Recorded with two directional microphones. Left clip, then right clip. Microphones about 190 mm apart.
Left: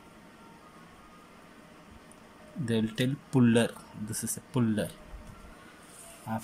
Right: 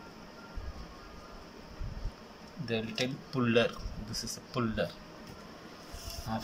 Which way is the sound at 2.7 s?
25° left (ahead or behind).